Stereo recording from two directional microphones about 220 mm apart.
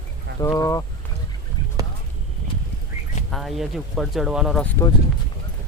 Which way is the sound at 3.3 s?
Centre (ahead or behind).